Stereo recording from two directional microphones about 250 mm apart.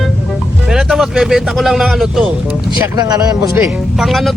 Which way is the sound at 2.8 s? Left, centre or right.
Centre.